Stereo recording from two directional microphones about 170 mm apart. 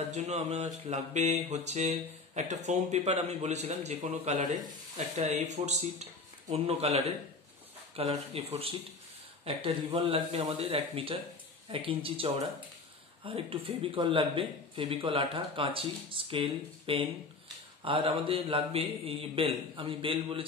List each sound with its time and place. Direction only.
0.1 s speech: 40° right (ahead or behind)